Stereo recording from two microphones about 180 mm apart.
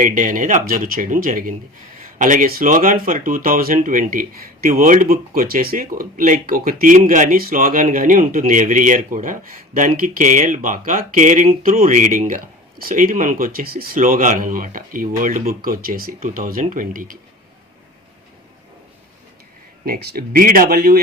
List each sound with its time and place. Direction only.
0.0 s speech: 50° right (ahead or behind)
19.8 s speech: 55° right (ahead or behind)